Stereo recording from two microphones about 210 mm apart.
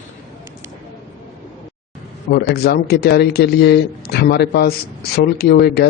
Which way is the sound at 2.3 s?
50° left (ahead or behind).